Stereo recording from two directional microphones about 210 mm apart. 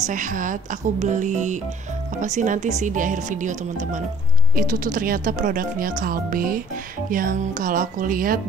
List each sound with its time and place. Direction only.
0.0 s speech: 40° right (ahead or behind)
4.6 s speech: 40° right (ahead or behind)